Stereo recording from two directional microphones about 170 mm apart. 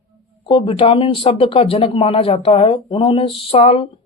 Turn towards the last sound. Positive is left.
turn(degrees=35)  # may be behind; listen again after turning